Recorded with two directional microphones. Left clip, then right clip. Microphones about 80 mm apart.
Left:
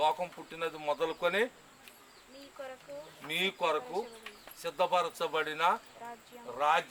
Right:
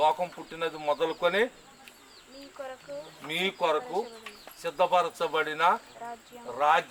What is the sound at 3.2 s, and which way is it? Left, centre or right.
Speech, centre.